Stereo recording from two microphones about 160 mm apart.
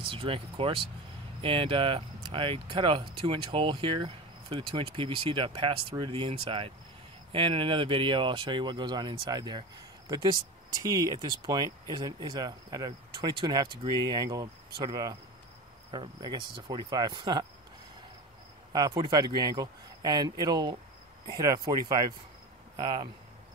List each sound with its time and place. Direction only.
0.0 s speech: 35° right (ahead or behind)
18.7 s speech: 25° right (ahead or behind)